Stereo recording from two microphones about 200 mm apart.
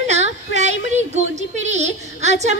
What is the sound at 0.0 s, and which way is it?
Yodeling, 35° right (ahead or behind).